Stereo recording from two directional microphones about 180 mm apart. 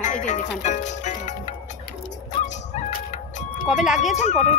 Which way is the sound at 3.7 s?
Centre (ahead or behind).